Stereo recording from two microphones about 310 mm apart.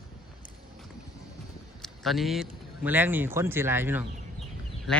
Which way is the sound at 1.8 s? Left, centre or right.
Centre.